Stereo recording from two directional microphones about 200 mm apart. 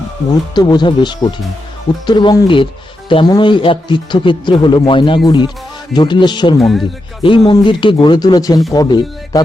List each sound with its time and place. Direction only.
0.5 s speech: 20° left (ahead or behind)
6.6 s speech: centre (ahead or behind)
7.2 s speech: 25° left (ahead or behind)